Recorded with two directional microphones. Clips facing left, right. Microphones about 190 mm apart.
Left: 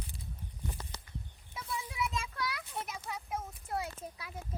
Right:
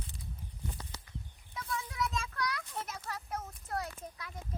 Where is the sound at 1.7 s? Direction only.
10° left (ahead or behind).